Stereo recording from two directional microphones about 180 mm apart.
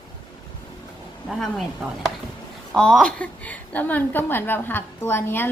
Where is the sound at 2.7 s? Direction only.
5° left (ahead or behind).